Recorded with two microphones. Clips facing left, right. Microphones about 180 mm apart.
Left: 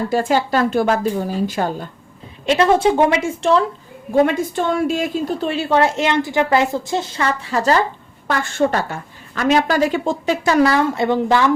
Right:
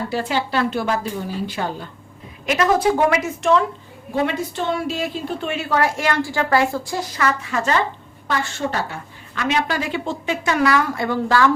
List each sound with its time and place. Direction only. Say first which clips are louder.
0.1 s a woman's voice: left 6 dB; 45° left (ahead or behind)
2.5 s a woman's voice: left 3 dB; 30° left (ahead or behind)
4.1 s a woman's voice: left 6 dB; 45° left (ahead or behind)
8.3 s a woman's voice: left 5 dB; 50° left (ahead or behind); by 11.5 s 20° left (ahead or behind)